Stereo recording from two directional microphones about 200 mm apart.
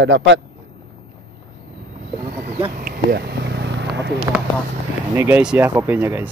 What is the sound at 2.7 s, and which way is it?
Vehicle, 50° right (ahead or behind).